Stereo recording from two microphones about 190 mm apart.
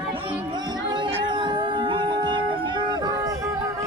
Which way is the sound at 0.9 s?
25° right (ahead or behind).